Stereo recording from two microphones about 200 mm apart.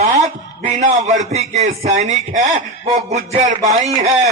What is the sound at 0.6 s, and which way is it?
A man's voice, 40° right (ahead or behind).